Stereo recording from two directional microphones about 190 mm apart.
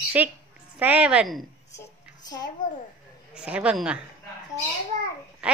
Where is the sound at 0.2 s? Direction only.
10° right (ahead or behind).